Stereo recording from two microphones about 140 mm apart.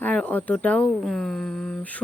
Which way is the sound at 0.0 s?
10° left (ahead or behind).